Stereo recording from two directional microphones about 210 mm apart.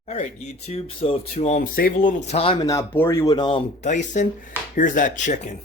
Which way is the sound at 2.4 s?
25° left (ahead or behind).